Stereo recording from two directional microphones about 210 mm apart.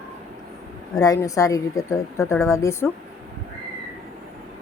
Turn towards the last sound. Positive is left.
turn(degrees=15)  # may be behind; listen again after turning